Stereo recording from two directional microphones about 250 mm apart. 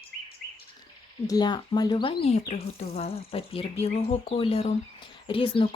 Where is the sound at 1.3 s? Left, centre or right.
Centre.